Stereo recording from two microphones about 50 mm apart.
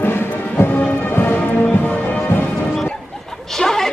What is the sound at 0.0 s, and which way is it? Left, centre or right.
Music, left.